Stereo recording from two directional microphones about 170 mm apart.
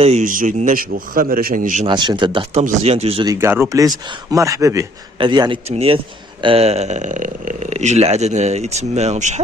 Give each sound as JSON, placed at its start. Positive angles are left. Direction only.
{"t": 0.0, "sound": "a man's voice", "side_deg": -45}
{"t": 1.9, "sound": "speech", "side_deg": -25}
{"t": 3.3, "sound": "speech", "side_deg": -15}